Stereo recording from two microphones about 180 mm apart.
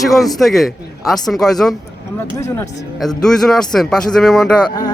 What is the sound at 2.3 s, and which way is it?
Speech, 15° left (ahead or behind).